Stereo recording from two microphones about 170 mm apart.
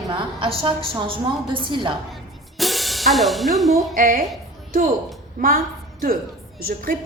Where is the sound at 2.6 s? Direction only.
Centre (ahead or behind).